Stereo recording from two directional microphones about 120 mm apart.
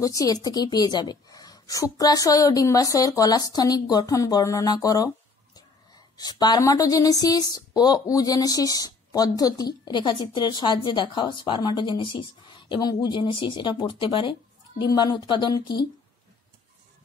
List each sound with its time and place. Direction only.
0.0 s a woman's voice: 30° left (ahead or behind)
6.1 s a woman's voice: 35° left (ahead or behind)